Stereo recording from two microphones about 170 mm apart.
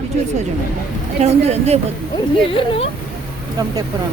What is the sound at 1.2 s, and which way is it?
Speech, 40° right (ahead or behind).